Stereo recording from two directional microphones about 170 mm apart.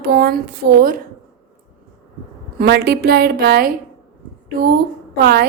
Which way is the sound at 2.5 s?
70° right (ahead or behind).